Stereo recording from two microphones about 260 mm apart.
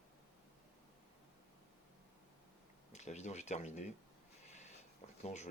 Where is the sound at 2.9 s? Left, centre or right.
Left.